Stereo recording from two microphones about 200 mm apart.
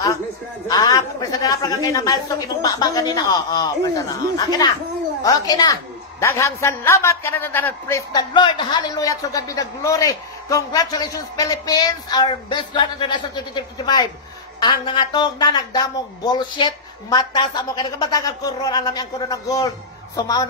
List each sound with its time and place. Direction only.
0.7 s a woman's voice: 20° left (ahead or behind)
14.6 s a woman's voice: 20° left (ahead or behind)